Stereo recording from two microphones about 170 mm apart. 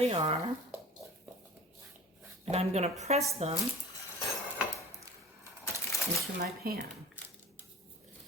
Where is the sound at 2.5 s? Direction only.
40° right (ahead or behind).